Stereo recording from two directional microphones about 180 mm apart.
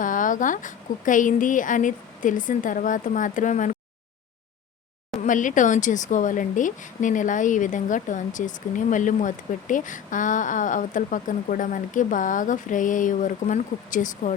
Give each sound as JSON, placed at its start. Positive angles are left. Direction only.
{"t": 0.0, "sound": "speech", "side_deg": 45}
{"t": 5.2, "sound": "speech", "side_deg": 45}